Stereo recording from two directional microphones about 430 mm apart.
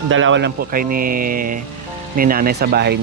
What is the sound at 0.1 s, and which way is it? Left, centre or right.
Speech, right.